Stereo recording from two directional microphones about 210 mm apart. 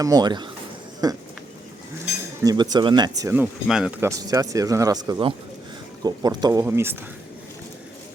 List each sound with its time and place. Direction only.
0.0 s speech: 15° right (ahead or behind)
2.4 s speech: 15° right (ahead or behind)